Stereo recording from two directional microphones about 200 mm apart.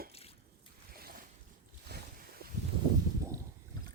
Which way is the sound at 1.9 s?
55° right (ahead or behind).